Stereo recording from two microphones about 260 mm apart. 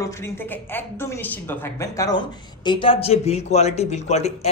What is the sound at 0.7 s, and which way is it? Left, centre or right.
A woman's voice, centre.